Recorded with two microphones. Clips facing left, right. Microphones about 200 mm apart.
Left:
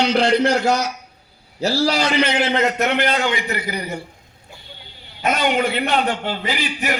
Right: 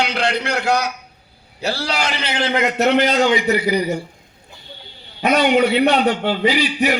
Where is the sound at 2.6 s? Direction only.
55° left (ahead or behind).